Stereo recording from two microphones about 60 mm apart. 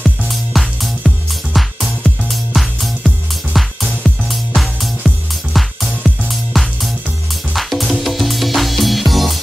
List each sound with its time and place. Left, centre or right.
0.0 s music: centre